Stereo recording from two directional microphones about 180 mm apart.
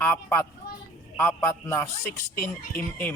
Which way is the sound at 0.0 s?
15° left (ahead or behind).